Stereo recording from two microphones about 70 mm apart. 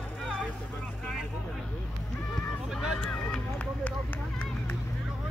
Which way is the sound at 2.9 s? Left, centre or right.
Centre.